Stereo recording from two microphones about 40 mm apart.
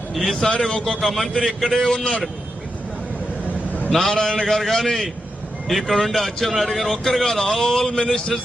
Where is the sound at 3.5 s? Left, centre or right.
Left.